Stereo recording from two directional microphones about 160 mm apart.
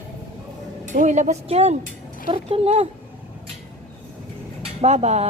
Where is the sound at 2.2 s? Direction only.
35° right (ahead or behind).